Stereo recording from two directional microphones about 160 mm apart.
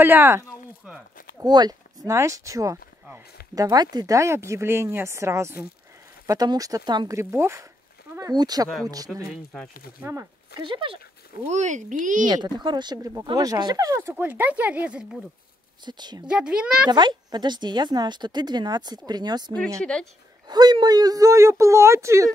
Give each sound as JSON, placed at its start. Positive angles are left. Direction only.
{"t": 0.0, "sound": "speech", "side_deg": -10}
{"t": 1.4, "sound": "speech", "side_deg": -25}
{"t": 9.5, "sound": "a child's voice", "side_deg": 5}
{"t": 10.6, "sound": "speech", "side_deg": -30}
{"t": 11.4, "sound": "speech", "side_deg": -45}
{"t": 12.3, "sound": "speech", "side_deg": -25}
{"t": 15.8, "sound": "speech", "side_deg": -25}
{"t": 16.3, "sound": "a child's voice", "side_deg": -5}
{"t": 16.9, "sound": "speech", "side_deg": -25}
{"t": 19.8, "sound": "a child's voice", "side_deg": 5}
{"t": 20.4, "sound": "speech", "side_deg": -25}